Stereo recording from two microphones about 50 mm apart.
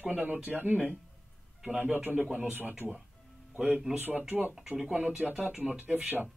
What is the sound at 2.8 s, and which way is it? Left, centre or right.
Speech, right.